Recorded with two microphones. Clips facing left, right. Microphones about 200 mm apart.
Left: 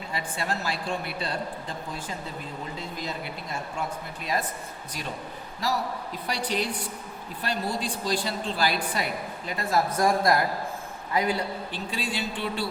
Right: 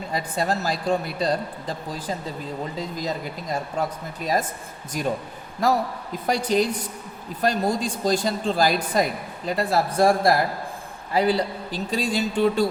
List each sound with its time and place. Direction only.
0.1 s a woman's voice: 40° right (ahead or behind)